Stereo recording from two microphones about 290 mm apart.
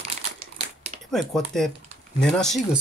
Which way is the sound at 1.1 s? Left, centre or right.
Centre.